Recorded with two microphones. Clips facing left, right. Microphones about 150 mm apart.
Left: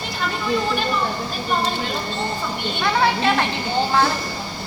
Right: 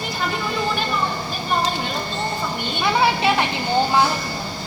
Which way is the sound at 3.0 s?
15° right (ahead or behind).